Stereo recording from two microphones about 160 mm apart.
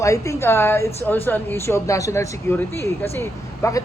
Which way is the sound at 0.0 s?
20° left (ahead or behind).